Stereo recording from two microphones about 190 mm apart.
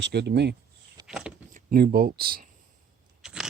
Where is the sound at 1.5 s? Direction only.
50° right (ahead or behind).